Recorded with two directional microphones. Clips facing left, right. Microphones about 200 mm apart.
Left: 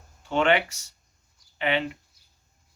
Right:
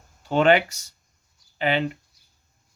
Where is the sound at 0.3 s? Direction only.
35° right (ahead or behind).